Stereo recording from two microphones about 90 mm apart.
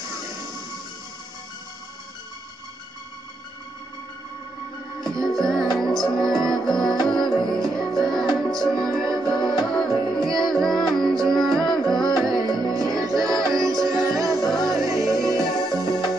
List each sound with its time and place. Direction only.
5.0 s music: 5° left (ahead or behind)
14.7 s music: 40° right (ahead or behind)
15.3 s music: centre (ahead or behind)